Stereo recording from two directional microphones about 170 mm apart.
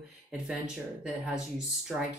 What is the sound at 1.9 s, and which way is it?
Speech, 5° right (ahead or behind).